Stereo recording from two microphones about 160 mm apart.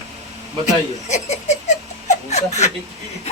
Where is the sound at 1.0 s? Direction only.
45° left (ahead or behind).